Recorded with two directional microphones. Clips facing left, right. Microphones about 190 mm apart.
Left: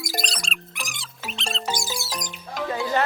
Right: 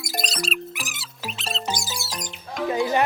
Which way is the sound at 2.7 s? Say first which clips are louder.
Right 3 dB; 15° right (ahead or behind).